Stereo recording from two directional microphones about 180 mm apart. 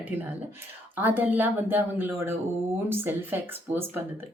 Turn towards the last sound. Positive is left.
turn(degrees=-10)  # may be behind; listen again after turning